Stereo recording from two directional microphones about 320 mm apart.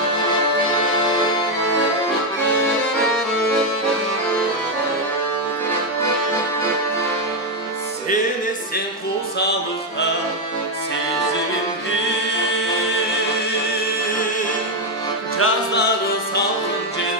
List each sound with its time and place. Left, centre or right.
15.3 s music: left